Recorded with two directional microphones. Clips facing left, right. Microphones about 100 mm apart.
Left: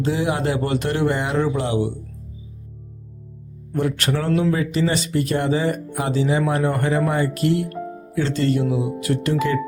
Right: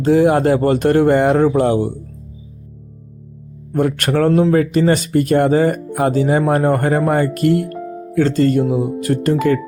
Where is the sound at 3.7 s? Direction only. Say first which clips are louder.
Right 6 dB; 50° right (ahead or behind).